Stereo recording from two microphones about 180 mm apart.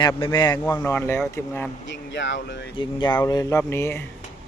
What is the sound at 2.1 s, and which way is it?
Speech, 90° left.